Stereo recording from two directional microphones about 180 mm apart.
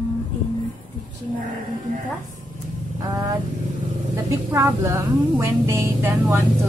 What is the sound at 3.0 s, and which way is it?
Vehicle, 20° right (ahead or behind).